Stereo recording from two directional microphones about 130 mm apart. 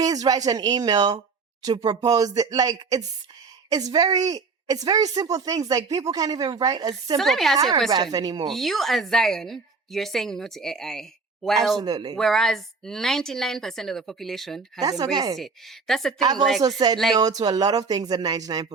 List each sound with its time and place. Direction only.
0.0 s a woman's voice: 30° right (ahead or behind)
7.2 s a woman's voice: centre (ahead or behind)
7.9 s a woman's voice: 30° right (ahead or behind)
8.4 s a woman's voice: centre (ahead or behind)
11.8 s speech: 30° right (ahead or behind)
12.1 s a woman's voice: centre (ahead or behind)
14.8 s a woman's voice: 30° right (ahead or behind)
15.9 s a woman's voice: 5° left (ahead or behind)
16.6 s a woman's voice: 30° right (ahead or behind)